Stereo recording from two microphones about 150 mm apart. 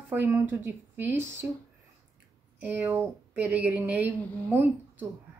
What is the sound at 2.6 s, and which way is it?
Speech, 10° right (ahead or behind).